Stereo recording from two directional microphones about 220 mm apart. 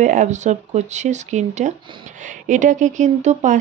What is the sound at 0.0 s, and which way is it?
Speech, 35° right (ahead or behind).